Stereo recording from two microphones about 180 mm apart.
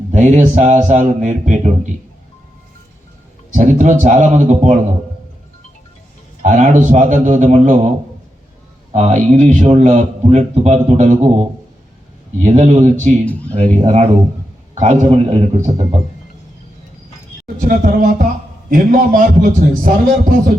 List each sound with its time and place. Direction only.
0.1 s speech: 40° right (ahead or behind)
3.5 s speech: 45° right (ahead or behind)
6.4 s speech: 45° right (ahead or behind)
8.9 s a man's voice: 45° right (ahead or behind)
17.4 s speech: 50° right (ahead or behind)